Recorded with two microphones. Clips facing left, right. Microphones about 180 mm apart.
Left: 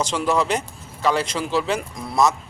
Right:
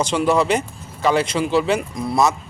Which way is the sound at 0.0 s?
Centre (ahead or behind).